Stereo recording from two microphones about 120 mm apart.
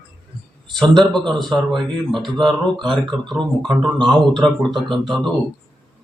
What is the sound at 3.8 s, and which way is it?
Speech, 40° right (ahead or behind).